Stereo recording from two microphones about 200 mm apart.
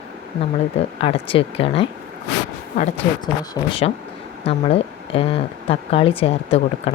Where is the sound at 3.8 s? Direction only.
30° left (ahead or behind).